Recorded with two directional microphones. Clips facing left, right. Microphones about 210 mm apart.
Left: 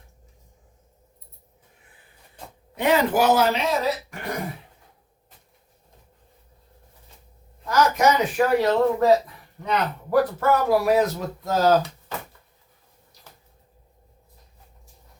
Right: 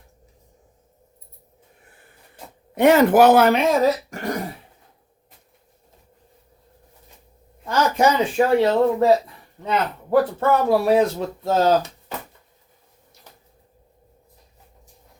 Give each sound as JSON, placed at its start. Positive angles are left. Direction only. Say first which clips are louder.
{"t": 2.7, "sound": "speech", "louder": "right 7 dB", "side_deg": -50}
{"t": 7.7, "sound": "speech", "louder": "right 1 dB", "side_deg": -30}